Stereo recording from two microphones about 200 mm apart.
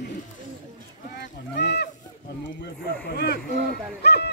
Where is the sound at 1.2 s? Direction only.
55° left (ahead or behind).